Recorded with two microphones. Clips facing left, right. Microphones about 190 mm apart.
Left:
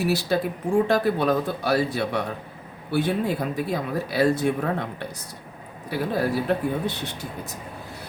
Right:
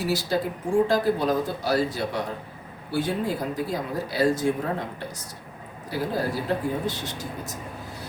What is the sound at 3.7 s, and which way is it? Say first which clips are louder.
Speech: left 2 dB; 60° left (ahead or behind).